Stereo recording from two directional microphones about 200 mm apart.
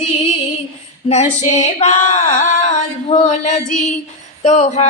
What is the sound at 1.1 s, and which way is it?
Mantra, 35° left (ahead or behind).